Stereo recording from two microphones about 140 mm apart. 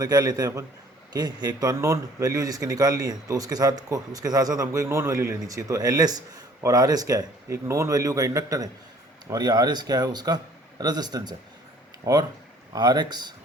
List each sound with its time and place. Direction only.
0.0 s a man's voice: 25° right (ahead or behind)
12.7 s speech: 30° right (ahead or behind)